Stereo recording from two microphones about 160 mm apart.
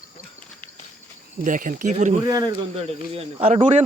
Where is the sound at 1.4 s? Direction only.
55° right (ahead or behind).